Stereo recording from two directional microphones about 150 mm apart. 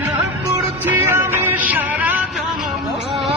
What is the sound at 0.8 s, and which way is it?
Music, 15° right (ahead or behind).